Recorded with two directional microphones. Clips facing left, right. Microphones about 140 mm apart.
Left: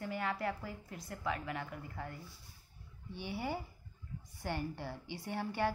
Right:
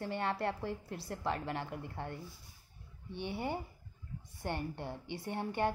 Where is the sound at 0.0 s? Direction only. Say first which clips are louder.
Right 2 dB; 30° right (ahead or behind).